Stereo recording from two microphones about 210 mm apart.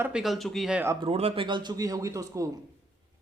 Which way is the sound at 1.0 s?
25° right (ahead or behind).